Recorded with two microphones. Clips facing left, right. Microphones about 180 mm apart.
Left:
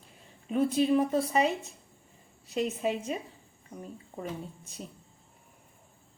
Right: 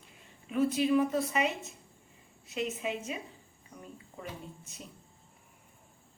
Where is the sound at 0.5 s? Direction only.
30° left (ahead or behind).